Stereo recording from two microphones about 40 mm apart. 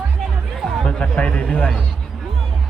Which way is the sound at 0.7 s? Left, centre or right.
Left.